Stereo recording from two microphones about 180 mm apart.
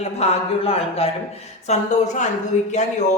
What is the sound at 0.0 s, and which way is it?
Speech, 35° left (ahead or behind).